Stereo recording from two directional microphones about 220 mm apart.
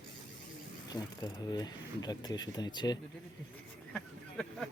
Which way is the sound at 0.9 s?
15° left (ahead or behind).